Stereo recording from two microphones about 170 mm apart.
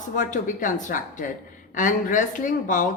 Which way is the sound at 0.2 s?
50° left (ahead or behind).